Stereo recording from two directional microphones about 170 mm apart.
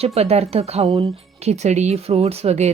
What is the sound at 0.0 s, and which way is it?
Speech, 40° right (ahead or behind).